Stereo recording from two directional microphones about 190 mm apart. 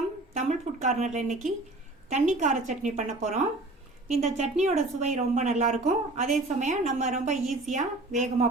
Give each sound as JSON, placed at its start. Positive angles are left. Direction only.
{"t": 0.3, "sound": "a woman's voice", "side_deg": -40}